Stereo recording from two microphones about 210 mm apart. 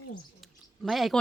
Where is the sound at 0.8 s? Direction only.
Centre (ahead or behind).